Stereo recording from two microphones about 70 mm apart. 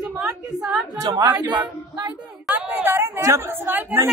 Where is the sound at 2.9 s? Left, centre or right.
Right.